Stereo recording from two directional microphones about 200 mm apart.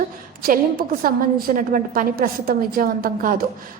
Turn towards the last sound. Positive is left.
turn(degrees=-45)  # may be behind; listen again after turning